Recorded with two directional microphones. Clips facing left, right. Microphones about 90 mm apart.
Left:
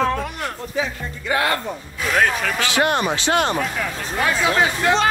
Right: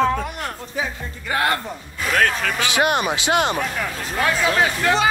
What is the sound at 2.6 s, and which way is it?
Speech, 15° right (ahead or behind).